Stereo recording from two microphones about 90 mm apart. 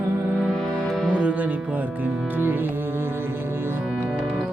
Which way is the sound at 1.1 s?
15° right (ahead or behind).